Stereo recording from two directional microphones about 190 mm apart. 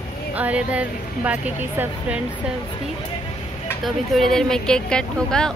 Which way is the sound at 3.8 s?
Centre (ahead or behind).